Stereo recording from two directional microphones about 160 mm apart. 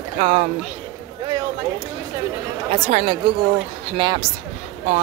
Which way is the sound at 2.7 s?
40° right (ahead or behind).